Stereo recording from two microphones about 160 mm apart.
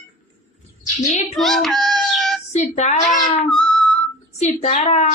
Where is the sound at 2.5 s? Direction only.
45° left (ahead or behind).